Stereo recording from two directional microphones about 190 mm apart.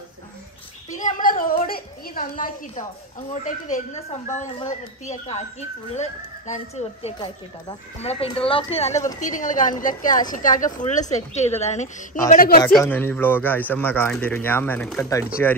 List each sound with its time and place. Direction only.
0.9 s a sound: 45° left (ahead or behind)
3.4 s a woman's voice: 40° left (ahead or behind)
12.3 s a woman's voice: 50° left (ahead or behind)
12.6 s speech: 10° left (ahead or behind)